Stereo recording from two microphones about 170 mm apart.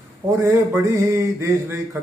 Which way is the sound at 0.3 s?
20° right (ahead or behind).